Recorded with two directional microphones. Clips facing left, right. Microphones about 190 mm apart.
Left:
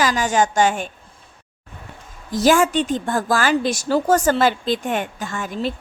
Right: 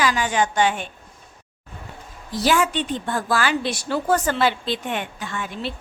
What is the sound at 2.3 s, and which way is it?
Speech, 45° left (ahead or behind).